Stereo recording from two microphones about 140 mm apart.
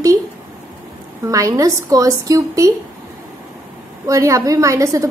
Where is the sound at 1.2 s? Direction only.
25° right (ahead or behind).